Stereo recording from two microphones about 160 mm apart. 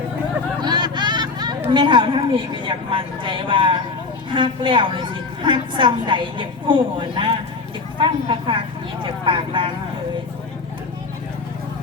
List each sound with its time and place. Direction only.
0.6 s hubbub: 25° right (ahead or behind)
1.7 s a woman's voice: 30° right (ahead or behind)